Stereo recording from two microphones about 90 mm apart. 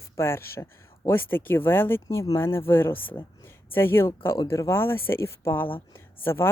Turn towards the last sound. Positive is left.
turn(degrees=25)  # may be behind; listen again after turning